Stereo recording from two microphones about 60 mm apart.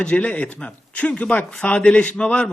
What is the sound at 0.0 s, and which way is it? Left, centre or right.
A man's voice, left.